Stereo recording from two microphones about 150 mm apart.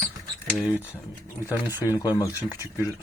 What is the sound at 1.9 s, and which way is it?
Speech, 25° left (ahead or behind).